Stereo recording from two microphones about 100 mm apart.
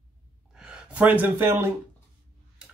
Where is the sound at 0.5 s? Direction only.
10° right (ahead or behind).